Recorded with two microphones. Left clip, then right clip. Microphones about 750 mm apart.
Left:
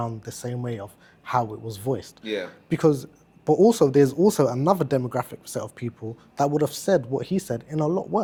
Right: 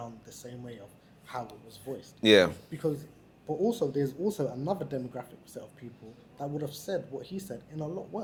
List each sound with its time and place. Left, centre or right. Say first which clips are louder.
0.0 s speech: left 12 dB; left
2.2 s speech: right 11 dB; right
2.6 s speech: left 12 dB; left